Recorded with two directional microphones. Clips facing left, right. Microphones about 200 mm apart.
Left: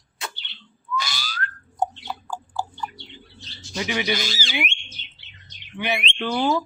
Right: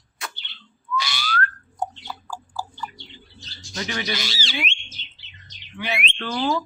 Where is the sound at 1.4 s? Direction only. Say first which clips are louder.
Left 6 dB; 20° left (ahead or behind).